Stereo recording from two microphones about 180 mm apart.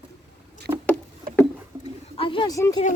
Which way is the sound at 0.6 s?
60° right (ahead or behind).